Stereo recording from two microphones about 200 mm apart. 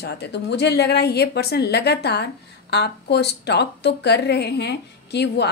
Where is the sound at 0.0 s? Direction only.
55° left (ahead or behind).